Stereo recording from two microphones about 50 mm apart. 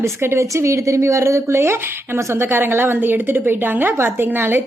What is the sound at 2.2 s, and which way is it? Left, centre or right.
A woman's voice, right.